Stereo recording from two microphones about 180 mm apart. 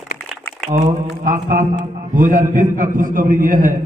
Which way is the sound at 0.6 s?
45° right (ahead or behind).